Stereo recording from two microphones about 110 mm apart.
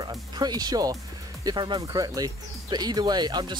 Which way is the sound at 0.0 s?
40° right (ahead or behind).